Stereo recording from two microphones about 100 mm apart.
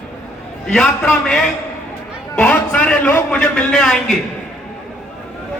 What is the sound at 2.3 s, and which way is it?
A man's voice, 15° left (ahead or behind).